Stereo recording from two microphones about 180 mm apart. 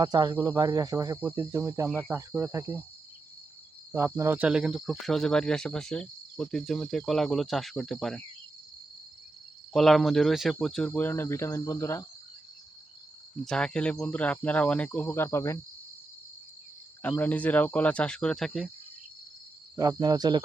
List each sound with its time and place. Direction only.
0.0 s speech: 25° right (ahead or behind)
1.2 s cricket: 15° right (ahead or behind)
3.9 s speech: 15° right (ahead or behind); by 8.2 s centre (ahead or behind)
9.7 s speech: centre (ahead or behind)
13.4 s speech: 5° left (ahead or behind)
17.0 s speech: 10° left (ahead or behind)
19.7 s speech: 20° right (ahead or behind)